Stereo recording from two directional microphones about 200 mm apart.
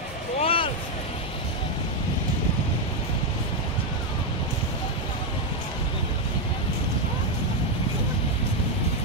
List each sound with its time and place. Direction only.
0.4 s vehicle: 30° left (ahead or behind)